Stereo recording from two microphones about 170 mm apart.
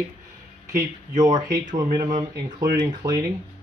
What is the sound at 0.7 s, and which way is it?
Speech, 20° right (ahead or behind).